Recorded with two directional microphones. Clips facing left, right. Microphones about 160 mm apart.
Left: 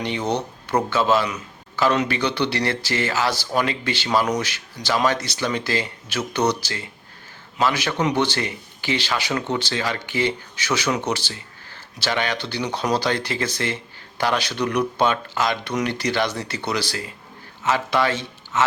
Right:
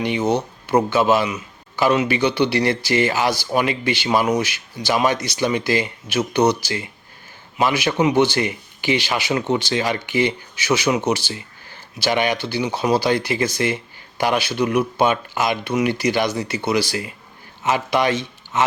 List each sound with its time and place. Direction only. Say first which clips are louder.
0.0 s speech: right 4 dB; 10° right (ahead or behind)